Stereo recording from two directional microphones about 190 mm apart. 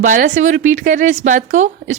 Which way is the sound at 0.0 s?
40° right (ahead or behind).